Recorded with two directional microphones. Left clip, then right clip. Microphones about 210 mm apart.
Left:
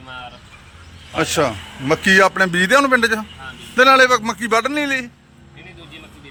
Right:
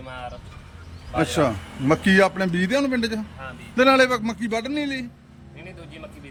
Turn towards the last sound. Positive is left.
turn(degrees=-5)  # may be behind; listen again after turning